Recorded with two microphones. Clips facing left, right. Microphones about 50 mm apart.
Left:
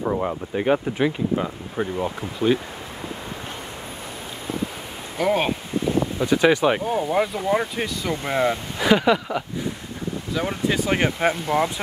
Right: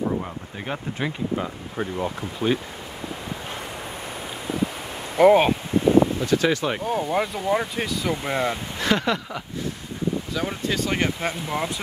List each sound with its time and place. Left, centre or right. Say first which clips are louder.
0.0 s speech: left 3 dB; left
1.0 s speech: left 4 dB; centre
5.1 s speech: right 7 dB; centre
6.1 s speech: left 3 dB; centre
6.8 s speech: left 2 dB; centre